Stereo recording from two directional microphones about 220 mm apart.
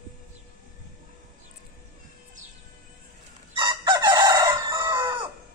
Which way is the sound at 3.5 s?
20° right (ahead or behind).